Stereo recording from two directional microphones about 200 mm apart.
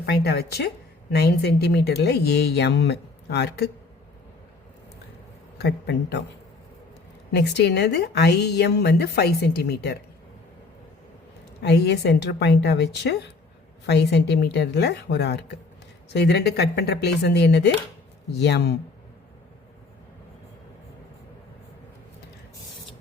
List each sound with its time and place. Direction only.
0.0 s a woman's voice: 50° left (ahead or behind)
5.5 s a woman's voice: 55° left (ahead or behind)
7.3 s a woman's voice: 55° left (ahead or behind)
11.6 s a woman's voice: 55° left (ahead or behind)